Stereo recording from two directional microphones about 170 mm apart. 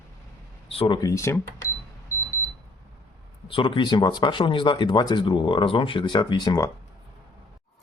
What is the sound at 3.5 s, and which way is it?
Speech, 30° left (ahead or behind).